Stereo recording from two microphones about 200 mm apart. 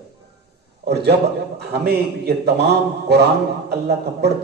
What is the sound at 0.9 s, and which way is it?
A man's voice, 55° right (ahead or behind).